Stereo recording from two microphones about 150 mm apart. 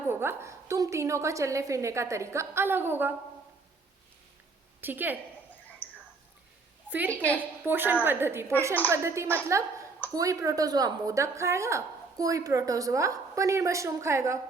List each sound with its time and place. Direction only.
0.1 s a woman's voice: 15° right (ahead or behind)
4.8 s a woman's voice: 10° right (ahead or behind)
5.8 s a sound: 10° left (ahead or behind)
7.1 s a woman's voice: 10° left (ahead or behind)
7.6 s a woman's voice: 15° right (ahead or behind)